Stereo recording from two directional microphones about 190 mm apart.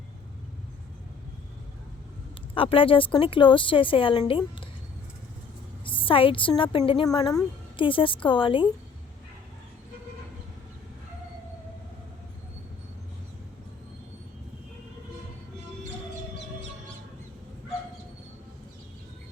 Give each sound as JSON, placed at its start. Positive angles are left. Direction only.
{"t": 2.6, "sound": "a woman's voice", "side_deg": 30}
{"t": 5.8, "sound": "a woman's voice", "side_deg": 25}